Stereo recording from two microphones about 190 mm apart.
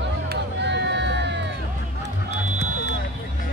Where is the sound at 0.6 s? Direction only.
65° right (ahead or behind).